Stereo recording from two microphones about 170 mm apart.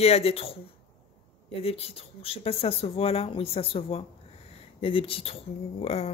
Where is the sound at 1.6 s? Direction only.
35° left (ahead or behind).